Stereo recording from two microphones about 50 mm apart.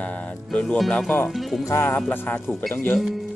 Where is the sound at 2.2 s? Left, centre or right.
Left.